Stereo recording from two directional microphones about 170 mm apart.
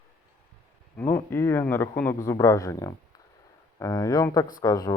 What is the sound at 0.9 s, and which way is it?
A man's voice, 10° left (ahead or behind).